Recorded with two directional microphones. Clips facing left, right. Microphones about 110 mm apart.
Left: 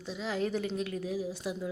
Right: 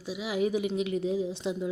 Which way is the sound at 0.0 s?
10° right (ahead or behind).